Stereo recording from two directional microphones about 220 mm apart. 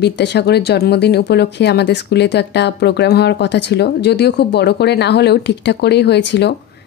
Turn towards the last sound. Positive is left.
turn(degrees=50)  # may be behind; listen again after turning